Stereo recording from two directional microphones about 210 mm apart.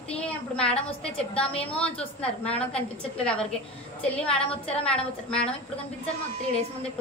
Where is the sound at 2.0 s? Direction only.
30° left (ahead or behind).